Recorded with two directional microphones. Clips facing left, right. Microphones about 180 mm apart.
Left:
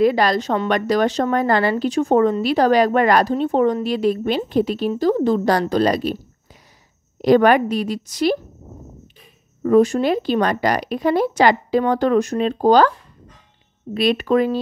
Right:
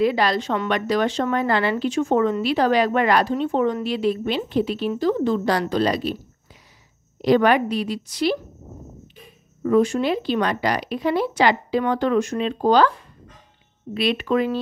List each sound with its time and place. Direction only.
0.0 s a woman's voice: 45° left (ahead or behind)
7.2 s speech: 45° left (ahead or behind)
9.6 s a woman's voice: 40° left (ahead or behind)
13.9 s a woman's voice: 40° left (ahead or behind)